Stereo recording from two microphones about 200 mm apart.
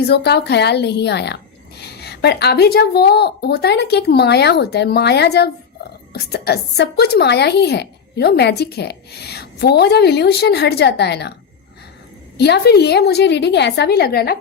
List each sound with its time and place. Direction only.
0.1 s speech: 55° left (ahead or behind)
12.4 s speech: 55° left (ahead or behind)